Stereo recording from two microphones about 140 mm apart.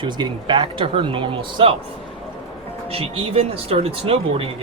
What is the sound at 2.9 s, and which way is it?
Speech, 45° right (ahead or behind).